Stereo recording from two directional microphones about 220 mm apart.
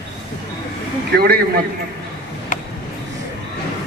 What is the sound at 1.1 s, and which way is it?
Speech, 45° right (ahead or behind).